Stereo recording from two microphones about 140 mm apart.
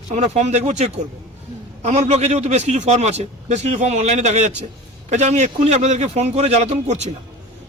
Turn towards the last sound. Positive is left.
turn(degrees=-50)  # may be behind; listen again after turning